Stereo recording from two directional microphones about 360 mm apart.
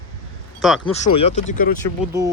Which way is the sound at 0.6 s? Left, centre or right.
Centre.